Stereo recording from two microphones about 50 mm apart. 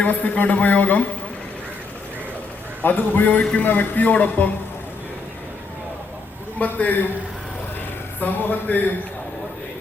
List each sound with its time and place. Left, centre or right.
0.0 s a man's voice: left
2.8 s a man's voice: left
6.6 s a man's voice: left
8.2 s a man's voice: left